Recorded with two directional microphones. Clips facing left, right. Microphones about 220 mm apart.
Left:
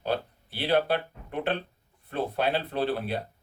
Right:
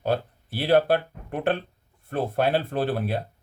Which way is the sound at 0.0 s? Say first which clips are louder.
Right 4 dB; 50° right (ahead or behind).